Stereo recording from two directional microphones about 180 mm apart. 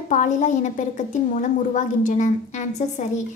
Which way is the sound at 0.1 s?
45° left (ahead or behind).